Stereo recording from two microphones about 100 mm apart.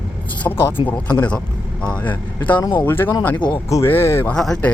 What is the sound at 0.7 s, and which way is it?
Speech, 50° left (ahead or behind).